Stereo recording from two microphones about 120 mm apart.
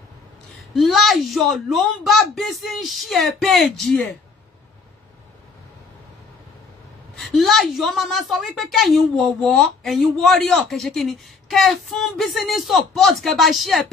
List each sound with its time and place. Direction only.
0.7 s a woman's voice: centre (ahead or behind)
7.2 s a woman's voice: centre (ahead or behind)